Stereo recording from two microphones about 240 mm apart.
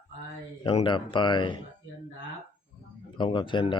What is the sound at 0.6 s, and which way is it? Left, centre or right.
Speech, left.